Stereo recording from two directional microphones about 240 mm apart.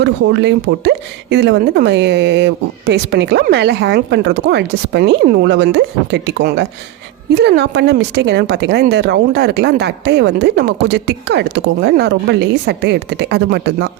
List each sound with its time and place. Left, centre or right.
0.0 s speech: right